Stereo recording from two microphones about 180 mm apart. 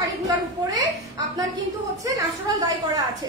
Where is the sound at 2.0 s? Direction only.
20° right (ahead or behind).